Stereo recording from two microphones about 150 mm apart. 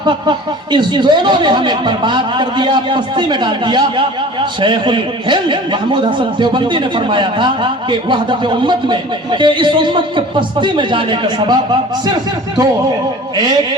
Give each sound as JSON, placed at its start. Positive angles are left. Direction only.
{"t": 0.0, "sound": "speech", "side_deg": -30}